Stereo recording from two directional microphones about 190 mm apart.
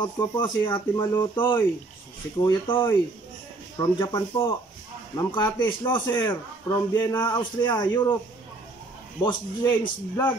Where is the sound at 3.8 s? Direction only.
20° left (ahead or behind).